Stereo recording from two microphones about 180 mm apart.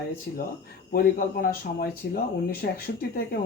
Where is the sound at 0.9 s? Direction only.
55° left (ahead or behind).